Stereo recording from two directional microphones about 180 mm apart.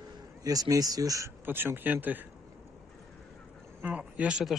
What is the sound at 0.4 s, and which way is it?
Speech, 20° right (ahead or behind).